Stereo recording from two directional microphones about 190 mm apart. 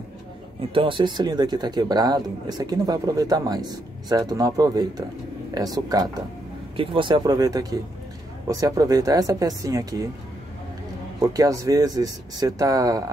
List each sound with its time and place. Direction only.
0.7 s speech: 25° right (ahead or behind)
11.1 s speech: 20° right (ahead or behind)